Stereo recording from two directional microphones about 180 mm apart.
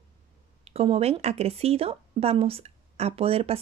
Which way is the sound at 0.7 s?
35° right (ahead or behind).